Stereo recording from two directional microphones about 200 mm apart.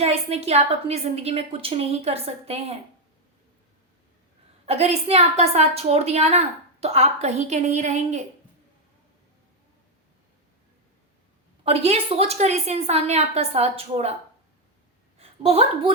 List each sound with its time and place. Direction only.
0.0 s a woman's voice: 30° right (ahead or behind)
4.6 s a woman's voice: 30° right (ahead or behind)
11.6 s a woman's voice: 30° right (ahead or behind)
15.2 s a woman's voice: 30° right (ahead or behind)